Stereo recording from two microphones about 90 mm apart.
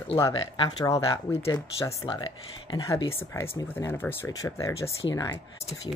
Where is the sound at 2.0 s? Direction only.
70° left (ahead or behind).